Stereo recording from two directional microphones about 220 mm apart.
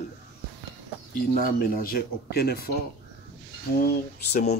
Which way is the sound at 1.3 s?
40° left (ahead or behind).